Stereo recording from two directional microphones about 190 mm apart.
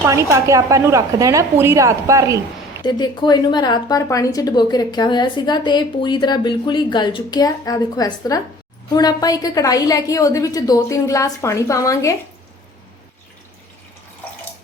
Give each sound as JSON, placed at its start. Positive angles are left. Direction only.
{"t": 0.0, "sound": "a woman's voice", "side_deg": -15}
{"t": 2.8, "sound": "a woman's voice", "side_deg": 25}